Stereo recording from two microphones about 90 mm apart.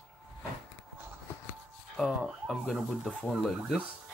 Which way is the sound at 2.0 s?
Centre (ahead or behind).